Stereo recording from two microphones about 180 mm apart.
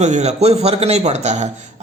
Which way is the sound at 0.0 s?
40° right (ahead or behind).